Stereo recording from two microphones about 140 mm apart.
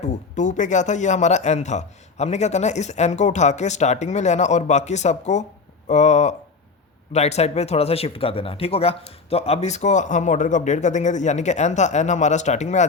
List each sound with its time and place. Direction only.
0.0 s speech: 60° left (ahead or behind)